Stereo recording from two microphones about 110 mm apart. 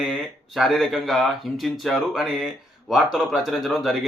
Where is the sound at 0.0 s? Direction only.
Centre (ahead or behind).